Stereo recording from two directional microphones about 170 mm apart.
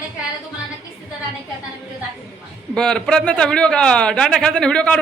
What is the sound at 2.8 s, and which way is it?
A man's voice, 5° left (ahead or behind).